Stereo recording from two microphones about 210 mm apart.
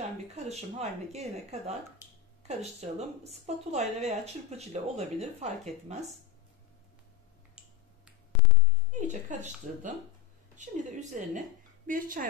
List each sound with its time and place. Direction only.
0.4 s speech: 30° right (ahead or behind)
7.6 s finger snapping: 5° right (ahead or behind)
8.9 s a woman's voice: 35° right (ahead or behind)